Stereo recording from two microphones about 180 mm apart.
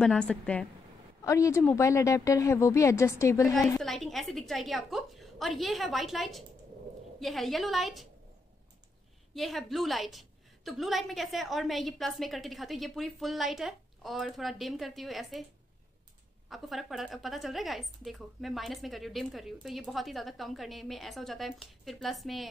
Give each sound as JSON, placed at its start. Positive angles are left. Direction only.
{"t": 0.0, "sound": "a woman's voice", "side_deg": 5}
{"t": 1.2, "sound": "a woman's voice", "side_deg": 15}
{"t": 3.8, "sound": "a woman's voice", "side_deg": 0}
{"t": 9.3, "sound": "a woman's voice", "side_deg": 0}
{"t": 16.4, "sound": "a woman's voice", "side_deg": 0}